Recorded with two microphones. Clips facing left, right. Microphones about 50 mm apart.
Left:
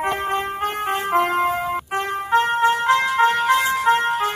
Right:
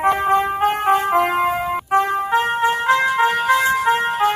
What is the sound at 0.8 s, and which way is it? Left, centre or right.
Music, centre.